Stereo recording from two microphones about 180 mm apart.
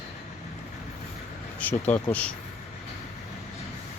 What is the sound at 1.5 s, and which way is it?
Speech, 10° left (ahead or behind).